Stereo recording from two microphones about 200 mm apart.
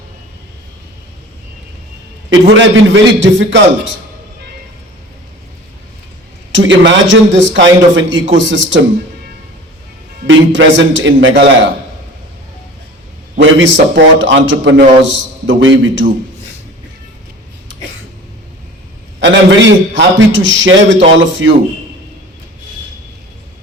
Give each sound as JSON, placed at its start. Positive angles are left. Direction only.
{"t": 2.3, "sound": "a man's voice", "side_deg": -70}
{"t": 6.5, "sound": "a man's voice", "side_deg": -70}
{"t": 10.2, "sound": "a man's voice", "side_deg": -70}
{"t": 13.6, "sound": "a man's voice", "side_deg": -70}
{"t": 19.2, "sound": "a man's voice", "side_deg": -65}